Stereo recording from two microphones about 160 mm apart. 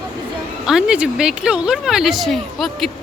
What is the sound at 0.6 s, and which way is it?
Speech, 5° right (ahead or behind).